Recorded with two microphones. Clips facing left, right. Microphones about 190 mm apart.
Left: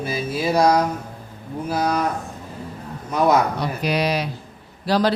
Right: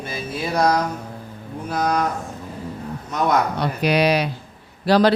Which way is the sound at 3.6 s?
65° right (ahead or behind).